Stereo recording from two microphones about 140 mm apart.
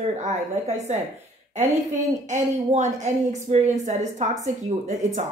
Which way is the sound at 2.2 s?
60° right (ahead or behind).